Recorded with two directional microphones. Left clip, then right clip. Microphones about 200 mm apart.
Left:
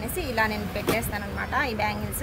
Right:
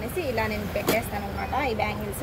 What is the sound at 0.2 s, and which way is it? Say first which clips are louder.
A woman's voice: left 2 dB; 55° left (ahead or behind).